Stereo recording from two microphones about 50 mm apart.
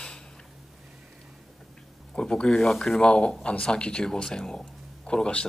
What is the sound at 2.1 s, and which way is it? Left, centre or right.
Speech, centre.